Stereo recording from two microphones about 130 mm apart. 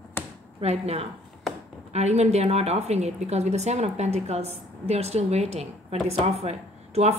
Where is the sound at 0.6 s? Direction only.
55° right (ahead or behind).